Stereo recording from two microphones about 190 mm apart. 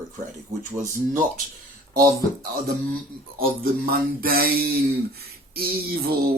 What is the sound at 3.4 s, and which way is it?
Speech, 50° right (ahead or behind).